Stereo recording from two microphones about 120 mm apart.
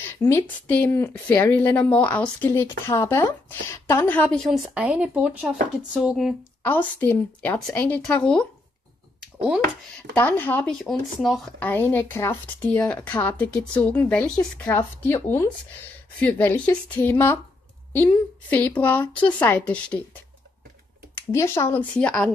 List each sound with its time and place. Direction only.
0.0 s a woman's voice: 20° left (ahead or behind)
4.7 s speech: 10° right (ahead or behind)
7.0 s a woman's voice: 20° left (ahead or behind)
10.1 s a woman's voice: 15° left (ahead or behind)
10.7 s speech: centre (ahead or behind)
11.6 s a woman's voice: 15° left (ahead or behind)
21.3 s speech: 20° left (ahead or behind)
21.9 s a woman's voice: 10° left (ahead or behind)